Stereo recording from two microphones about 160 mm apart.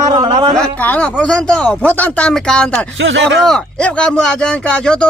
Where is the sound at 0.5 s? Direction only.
5° left (ahead or behind).